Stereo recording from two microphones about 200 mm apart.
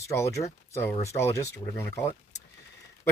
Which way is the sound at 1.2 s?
15° left (ahead or behind).